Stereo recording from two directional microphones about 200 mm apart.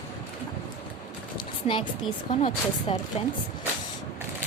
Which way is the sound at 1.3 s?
25° left (ahead or behind).